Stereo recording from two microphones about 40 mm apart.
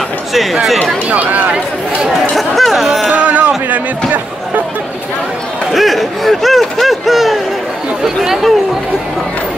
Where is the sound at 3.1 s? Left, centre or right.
Right.